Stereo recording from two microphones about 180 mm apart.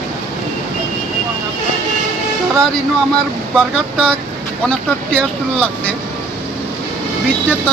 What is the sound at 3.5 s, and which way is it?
Speech, 5° left (ahead or behind).